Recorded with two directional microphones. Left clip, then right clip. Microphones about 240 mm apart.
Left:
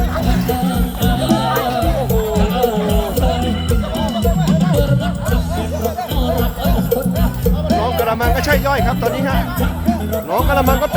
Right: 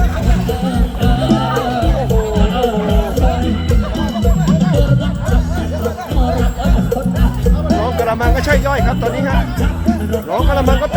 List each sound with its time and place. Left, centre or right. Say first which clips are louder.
1.0 s music: right 1 dB; left
4.2 s music: right 3 dB; left
7.8 s speech: even; centre
10.3 s speech: left 1 dB; centre